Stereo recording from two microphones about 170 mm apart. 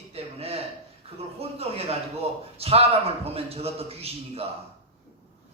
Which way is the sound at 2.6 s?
35° right (ahead or behind).